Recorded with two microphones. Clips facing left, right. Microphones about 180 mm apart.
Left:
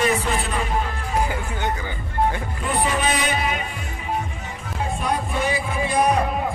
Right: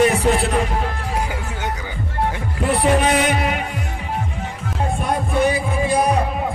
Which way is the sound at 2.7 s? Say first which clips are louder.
Right 6 dB; 65° right (ahead or behind).